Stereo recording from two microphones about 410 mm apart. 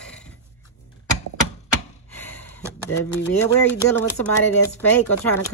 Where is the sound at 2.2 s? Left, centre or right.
Centre.